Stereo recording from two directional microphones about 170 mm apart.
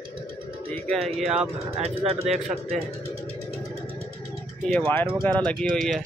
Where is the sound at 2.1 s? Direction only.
40° right (ahead or behind).